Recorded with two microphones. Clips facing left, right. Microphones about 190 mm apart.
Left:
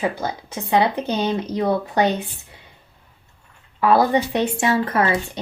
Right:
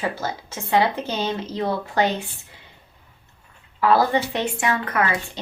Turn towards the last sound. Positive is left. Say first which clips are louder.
# left 3 dB
turn(degrees=25)  # may be behind; listen again after turning